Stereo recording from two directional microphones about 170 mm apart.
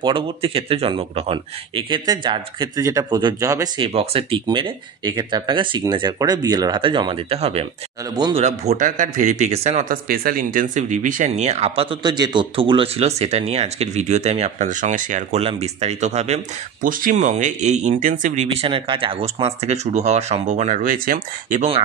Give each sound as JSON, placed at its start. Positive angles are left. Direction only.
{"t": 0.0, "sound": "a man's voice", "side_deg": -30}
{"t": 8.1, "sound": "a man's voice", "side_deg": -25}
{"t": 8.4, "sound": "speech", "side_deg": -40}
{"t": 10.0, "sound": "speech", "side_deg": -60}
{"t": 16.8, "sound": "speech", "side_deg": -55}
{"t": 18.7, "sound": "speech", "side_deg": -30}